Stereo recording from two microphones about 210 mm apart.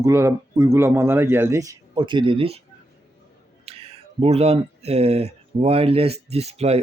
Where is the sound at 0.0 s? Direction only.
15° right (ahead or behind).